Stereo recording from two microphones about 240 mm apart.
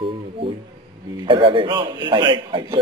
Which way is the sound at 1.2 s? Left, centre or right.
Right.